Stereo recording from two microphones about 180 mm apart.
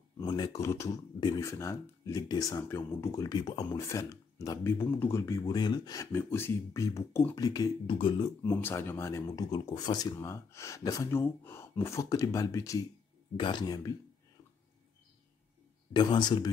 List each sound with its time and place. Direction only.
0.2 s speech: 20° left (ahead or behind)
8.5 s speech: 15° left (ahead or behind)
15.9 s speech: 25° left (ahead or behind)